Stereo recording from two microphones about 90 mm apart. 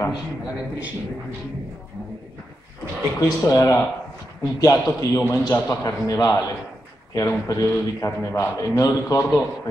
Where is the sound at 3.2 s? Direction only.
40° left (ahead or behind).